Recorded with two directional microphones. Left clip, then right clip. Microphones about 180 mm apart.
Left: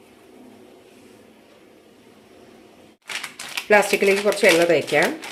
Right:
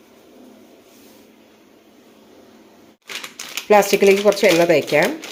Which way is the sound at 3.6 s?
30° right (ahead or behind).